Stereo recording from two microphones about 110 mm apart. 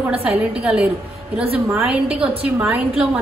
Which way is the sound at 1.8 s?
10° right (ahead or behind).